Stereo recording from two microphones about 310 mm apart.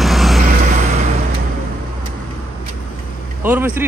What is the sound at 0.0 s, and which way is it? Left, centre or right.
Vehicle, centre.